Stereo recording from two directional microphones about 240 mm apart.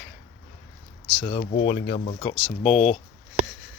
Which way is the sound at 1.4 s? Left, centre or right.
Left.